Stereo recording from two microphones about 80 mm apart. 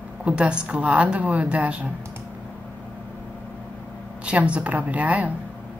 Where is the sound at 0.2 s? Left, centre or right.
Centre.